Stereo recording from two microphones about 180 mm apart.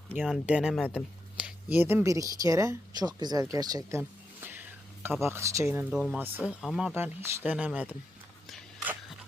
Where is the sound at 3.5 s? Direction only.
20° right (ahead or behind).